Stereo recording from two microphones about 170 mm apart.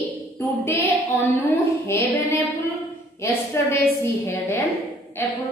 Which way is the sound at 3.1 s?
15° left (ahead or behind).